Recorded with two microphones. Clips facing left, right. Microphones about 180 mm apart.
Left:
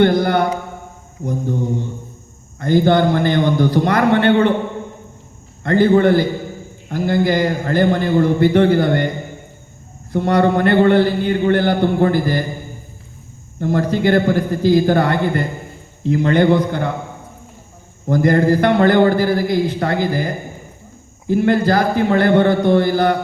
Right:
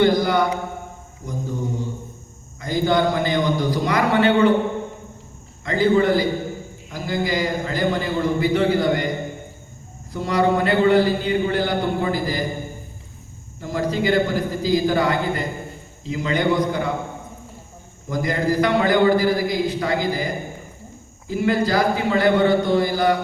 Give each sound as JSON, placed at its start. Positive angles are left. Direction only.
{"t": 0.0, "sound": "a sound", "side_deg": 60}
{"t": 2.6, "sound": "a man's voice", "side_deg": 60}
{"t": 5.6, "sound": "a man's voice", "side_deg": 60}
{"t": 10.1, "sound": "a man's voice", "side_deg": 60}
{"t": 13.6, "sound": "a man's voice", "side_deg": 60}
{"t": 18.1, "sound": "a man's voice", "side_deg": 55}